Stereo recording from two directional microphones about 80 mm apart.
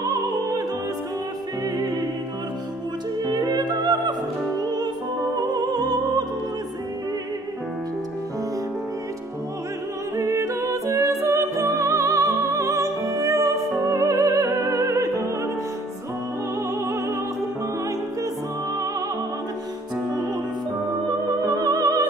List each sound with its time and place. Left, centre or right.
0.0 s opera: right
3.3 s music: right
10.1 s music: right
16.8 s opera: right
21.5 s music: right